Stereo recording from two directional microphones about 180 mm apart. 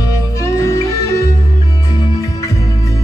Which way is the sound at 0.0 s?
15° left (ahead or behind).